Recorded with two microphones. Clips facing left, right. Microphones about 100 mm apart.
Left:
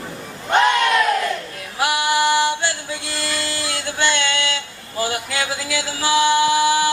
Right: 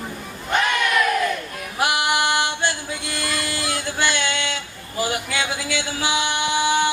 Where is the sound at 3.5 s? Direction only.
20° right (ahead or behind).